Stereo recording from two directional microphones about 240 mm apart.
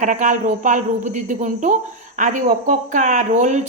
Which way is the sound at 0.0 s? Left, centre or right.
Right.